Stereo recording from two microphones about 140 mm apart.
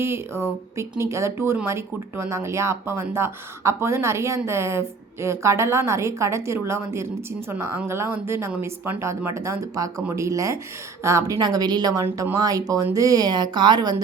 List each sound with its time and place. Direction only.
0.0 s a woman's voice: 15° right (ahead or behind)